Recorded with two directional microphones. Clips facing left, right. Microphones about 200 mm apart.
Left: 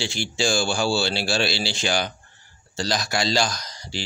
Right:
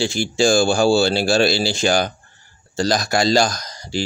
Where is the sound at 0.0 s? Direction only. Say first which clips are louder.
Right 8 dB; 45° right (ahead or behind).